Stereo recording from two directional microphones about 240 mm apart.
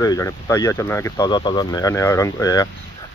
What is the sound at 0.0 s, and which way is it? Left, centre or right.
Speech, centre.